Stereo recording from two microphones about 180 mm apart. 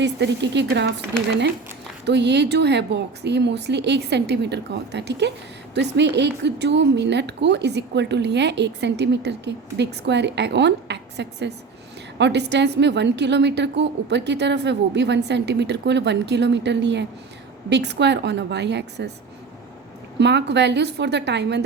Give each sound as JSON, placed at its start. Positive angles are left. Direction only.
{"t": 0.0, "sound": "a woman's voice", "side_deg": -75}
{"t": 2.0, "sound": "a woman's voice", "side_deg": -70}
{"t": 20.1, "sound": "a woman's voice", "side_deg": -75}